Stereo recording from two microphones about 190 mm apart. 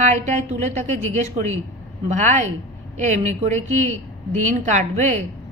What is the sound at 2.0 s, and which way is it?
A woman's voice, 40° right (ahead or behind).